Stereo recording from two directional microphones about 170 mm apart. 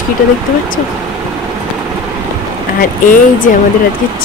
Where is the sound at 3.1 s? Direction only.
50° left (ahead or behind).